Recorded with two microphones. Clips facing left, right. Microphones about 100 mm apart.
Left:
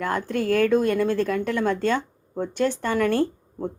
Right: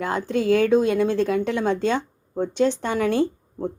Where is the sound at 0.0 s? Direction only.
10° right (ahead or behind).